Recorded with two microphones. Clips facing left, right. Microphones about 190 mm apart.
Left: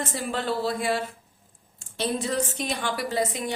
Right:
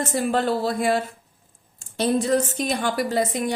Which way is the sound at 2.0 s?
45° right (ahead or behind).